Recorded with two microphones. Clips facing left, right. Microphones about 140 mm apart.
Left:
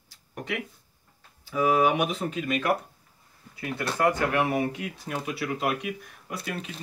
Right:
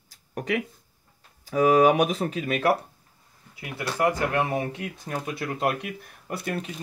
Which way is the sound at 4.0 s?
20° right (ahead or behind).